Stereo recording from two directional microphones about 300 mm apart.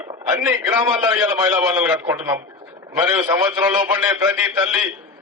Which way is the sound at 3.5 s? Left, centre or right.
Centre.